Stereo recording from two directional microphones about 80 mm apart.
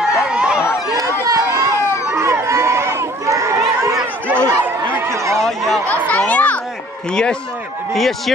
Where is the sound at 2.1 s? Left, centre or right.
Right.